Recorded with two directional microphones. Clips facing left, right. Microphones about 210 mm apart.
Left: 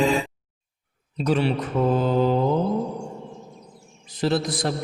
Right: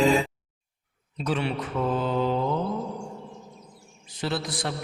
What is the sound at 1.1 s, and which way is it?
A man's voice, 35° left (ahead or behind).